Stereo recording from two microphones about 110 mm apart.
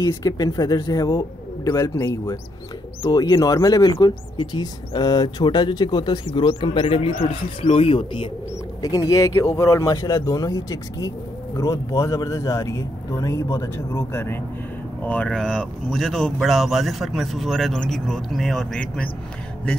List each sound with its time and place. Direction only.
0.0 s speech: 35° left (ahead or behind)
3.9 s speech: 45° left (ahead or behind)
8.8 s speech: 30° left (ahead or behind)
15.0 s speech: 10° left (ahead or behind)